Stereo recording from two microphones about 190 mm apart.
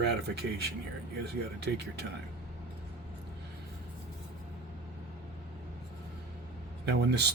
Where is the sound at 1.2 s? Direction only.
60° right (ahead or behind).